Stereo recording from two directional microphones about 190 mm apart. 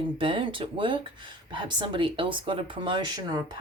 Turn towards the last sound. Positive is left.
turn(degrees=-20)  # may be behind; listen again after turning